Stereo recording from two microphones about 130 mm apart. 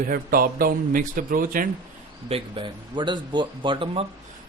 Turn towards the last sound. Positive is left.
turn(degrees=-45)  # may be behind; listen again after turning